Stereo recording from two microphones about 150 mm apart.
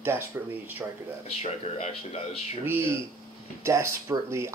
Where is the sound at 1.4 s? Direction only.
45° left (ahead or behind).